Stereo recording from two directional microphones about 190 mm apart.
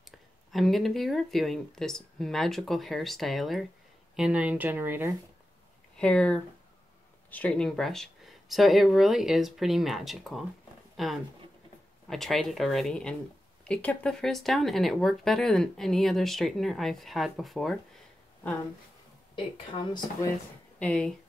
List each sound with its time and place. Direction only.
0.5 s speech: centre (ahead or behind)
5.9 s speech: 5° left (ahead or behind)
19.3 s speech: 30° left (ahead or behind)
20.8 s speech: 5° left (ahead or behind)